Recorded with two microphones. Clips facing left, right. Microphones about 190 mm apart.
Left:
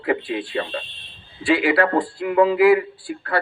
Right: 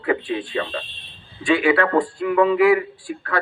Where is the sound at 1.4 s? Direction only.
35° left (ahead or behind).